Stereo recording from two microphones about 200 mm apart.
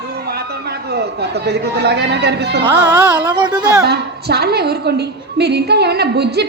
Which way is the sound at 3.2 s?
20° right (ahead or behind).